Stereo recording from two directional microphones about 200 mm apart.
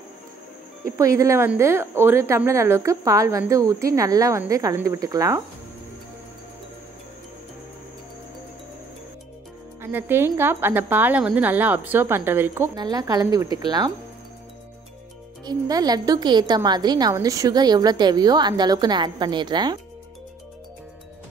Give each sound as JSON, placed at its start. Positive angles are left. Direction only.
{"t": 0.8, "sound": "a woman's voice", "side_deg": -15}
{"t": 9.8, "sound": "a woman's voice", "side_deg": -10}
{"t": 15.4, "sound": "a woman's voice", "side_deg": -20}